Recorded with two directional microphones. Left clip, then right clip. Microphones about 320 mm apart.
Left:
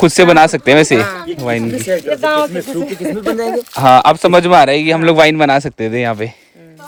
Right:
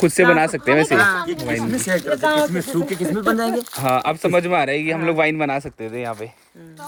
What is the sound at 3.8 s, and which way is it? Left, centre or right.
A man's voice, centre.